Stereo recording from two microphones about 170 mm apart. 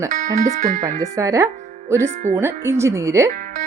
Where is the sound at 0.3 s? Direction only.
55° right (ahead or behind).